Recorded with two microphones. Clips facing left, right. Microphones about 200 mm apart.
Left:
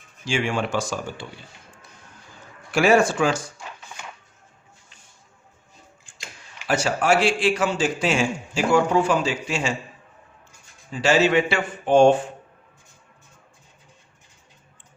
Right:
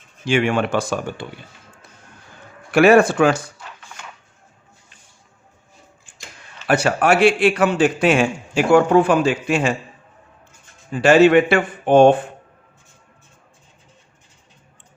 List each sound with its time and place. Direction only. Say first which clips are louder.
0.3 s a man's voice: right 6 dB; 60° right (ahead or behind)
2.7 s a man's voice: right 6 dB; 60° right (ahead or behind)
6.7 s a man's voice: right 4 dB; 60° right (ahead or behind)
10.9 s a man's voice: right 7 dB; 55° right (ahead or behind)